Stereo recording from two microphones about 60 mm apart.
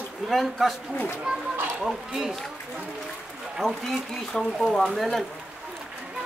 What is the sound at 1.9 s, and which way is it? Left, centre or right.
Speech, centre.